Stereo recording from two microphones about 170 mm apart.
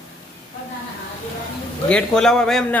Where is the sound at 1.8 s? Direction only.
5° left (ahead or behind).